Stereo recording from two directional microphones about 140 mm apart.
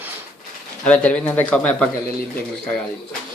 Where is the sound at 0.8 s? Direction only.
10° left (ahead or behind).